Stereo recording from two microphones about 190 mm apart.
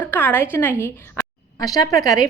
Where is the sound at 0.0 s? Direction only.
10° left (ahead or behind).